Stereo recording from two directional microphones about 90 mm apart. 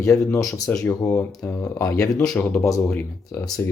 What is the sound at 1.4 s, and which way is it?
Speech, 25° left (ahead or behind).